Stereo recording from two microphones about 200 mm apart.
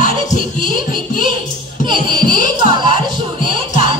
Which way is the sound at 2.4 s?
40° left (ahead or behind).